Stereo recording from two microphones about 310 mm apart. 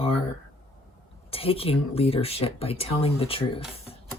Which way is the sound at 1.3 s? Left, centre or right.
Centre.